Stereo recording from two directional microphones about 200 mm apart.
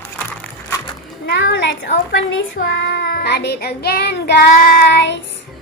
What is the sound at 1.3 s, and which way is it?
A woman's voice, 70° left (ahead or behind).